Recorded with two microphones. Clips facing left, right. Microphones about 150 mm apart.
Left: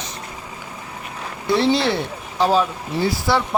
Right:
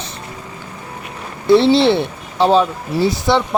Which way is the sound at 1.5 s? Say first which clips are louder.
Right 7 dB; 25° right (ahead or behind).